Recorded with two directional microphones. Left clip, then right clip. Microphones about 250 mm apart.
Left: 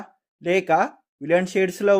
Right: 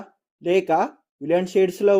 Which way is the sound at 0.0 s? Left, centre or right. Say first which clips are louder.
Right 1 dB; left.